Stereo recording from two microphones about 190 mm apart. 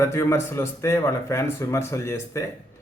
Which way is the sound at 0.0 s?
15° left (ahead or behind).